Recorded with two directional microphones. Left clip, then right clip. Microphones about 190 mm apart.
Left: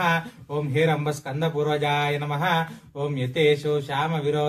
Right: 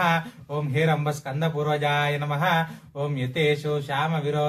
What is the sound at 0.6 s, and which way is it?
Mantra, 20° right (ahead or behind).